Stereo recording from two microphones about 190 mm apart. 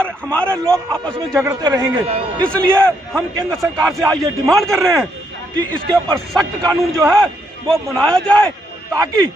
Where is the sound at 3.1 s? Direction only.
Centre (ahead or behind).